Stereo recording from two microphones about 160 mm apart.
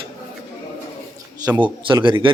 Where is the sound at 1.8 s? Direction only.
30° right (ahead or behind).